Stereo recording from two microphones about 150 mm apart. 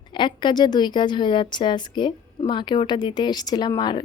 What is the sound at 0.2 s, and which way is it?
A woman's voice, 30° left (ahead or behind).